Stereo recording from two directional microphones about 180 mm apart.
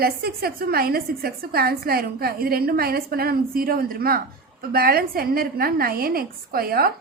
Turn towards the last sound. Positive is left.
turn(degrees=-55)  # may be behind; listen again after turning